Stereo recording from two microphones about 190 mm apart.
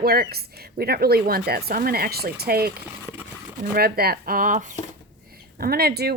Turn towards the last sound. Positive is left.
turn(degrees=-55)  # may be behind; listen again after turning